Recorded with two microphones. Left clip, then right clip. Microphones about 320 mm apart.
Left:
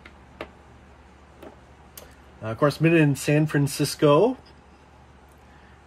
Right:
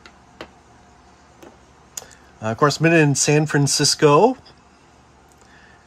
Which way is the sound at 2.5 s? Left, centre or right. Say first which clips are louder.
Right 4 dB; right.